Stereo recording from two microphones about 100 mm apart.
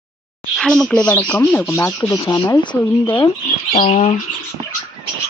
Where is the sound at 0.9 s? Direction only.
15° left (ahead or behind).